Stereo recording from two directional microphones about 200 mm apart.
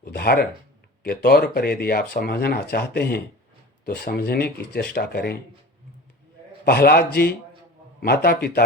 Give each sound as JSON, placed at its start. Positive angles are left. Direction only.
{"t": 0.0, "sound": "speech", "side_deg": 50}
{"t": 6.7, "sound": "speech", "side_deg": 50}